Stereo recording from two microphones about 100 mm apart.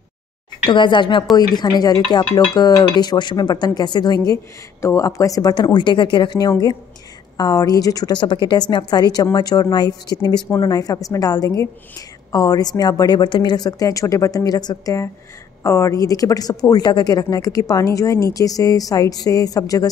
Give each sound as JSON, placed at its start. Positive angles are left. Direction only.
{"t": 0.7, "sound": "a woman's voice", "side_deg": 55}
{"t": 15.6, "sound": "a woman's voice", "side_deg": 30}